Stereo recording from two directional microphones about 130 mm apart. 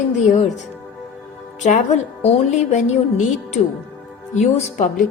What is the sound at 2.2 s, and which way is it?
A woman's voice, 60° left (ahead or behind).